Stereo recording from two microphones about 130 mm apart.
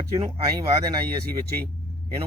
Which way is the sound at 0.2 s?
35° right (ahead or behind).